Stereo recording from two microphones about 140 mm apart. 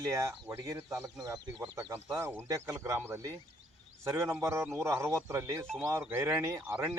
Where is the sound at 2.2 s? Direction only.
20° right (ahead or behind).